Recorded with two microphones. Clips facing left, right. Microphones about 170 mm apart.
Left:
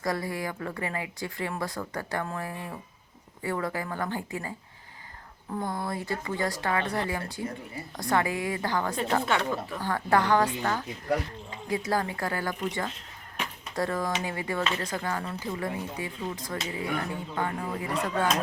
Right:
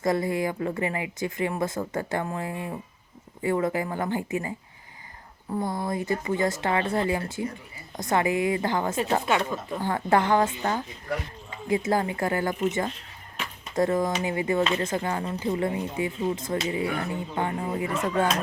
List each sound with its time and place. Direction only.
0.0 s a woman's voice: 20° right (ahead or behind)